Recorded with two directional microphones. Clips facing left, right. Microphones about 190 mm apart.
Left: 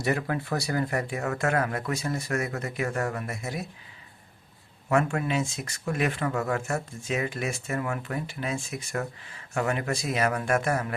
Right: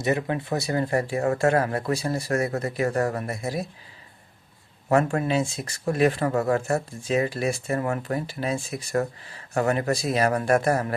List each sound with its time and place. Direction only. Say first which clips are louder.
0.0 s speech: right 3 dB; 20° right (ahead or behind)
4.9 s speech: right 4 dB; 35° right (ahead or behind)